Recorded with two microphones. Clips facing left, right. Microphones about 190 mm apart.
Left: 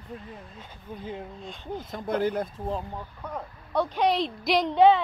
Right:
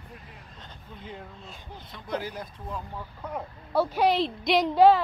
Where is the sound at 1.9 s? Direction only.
50° left (ahead or behind).